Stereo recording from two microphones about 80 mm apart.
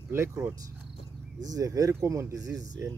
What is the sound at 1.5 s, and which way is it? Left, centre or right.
Speech, right.